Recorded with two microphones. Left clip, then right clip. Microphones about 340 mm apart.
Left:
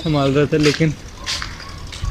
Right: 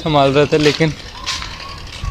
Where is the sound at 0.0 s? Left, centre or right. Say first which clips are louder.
Right 5 dB; centre.